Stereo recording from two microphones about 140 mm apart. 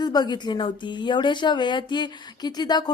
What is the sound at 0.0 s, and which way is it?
Speech, 30° left (ahead or behind).